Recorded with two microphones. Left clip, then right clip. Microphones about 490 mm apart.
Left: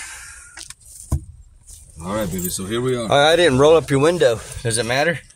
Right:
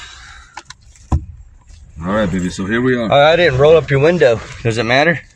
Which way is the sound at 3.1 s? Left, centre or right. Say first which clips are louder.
Right 3 dB; left.